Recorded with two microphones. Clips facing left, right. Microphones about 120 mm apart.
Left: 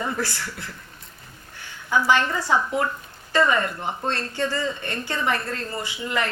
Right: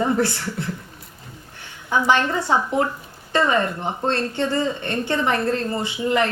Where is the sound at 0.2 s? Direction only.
25° right (ahead or behind).